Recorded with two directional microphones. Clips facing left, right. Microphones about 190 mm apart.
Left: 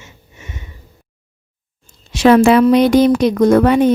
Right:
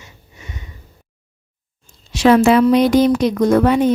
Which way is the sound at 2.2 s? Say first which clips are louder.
Left 2 dB; 65° left (ahead or behind).